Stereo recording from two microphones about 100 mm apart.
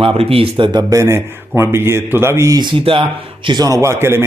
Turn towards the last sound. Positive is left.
turn(degrees=-25)  # may be behind; listen again after turning